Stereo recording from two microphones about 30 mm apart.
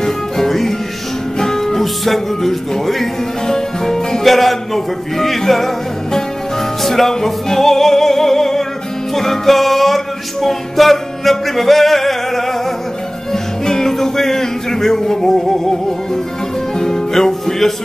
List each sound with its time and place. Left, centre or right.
0.0 s music: centre
3.4 s music: centre
4.2 s music: centre
6.8 s music: centre
16.7 s music: centre